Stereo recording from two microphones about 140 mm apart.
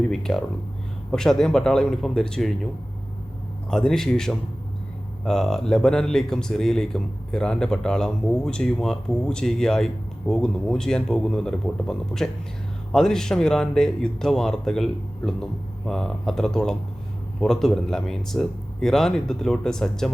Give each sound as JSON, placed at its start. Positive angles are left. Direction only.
{"t": 0.1, "sound": "speech", "side_deg": 5}
{"t": 3.7, "sound": "speech", "side_deg": 5}